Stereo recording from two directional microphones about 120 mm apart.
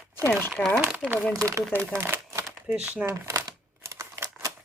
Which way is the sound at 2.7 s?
10° right (ahead or behind).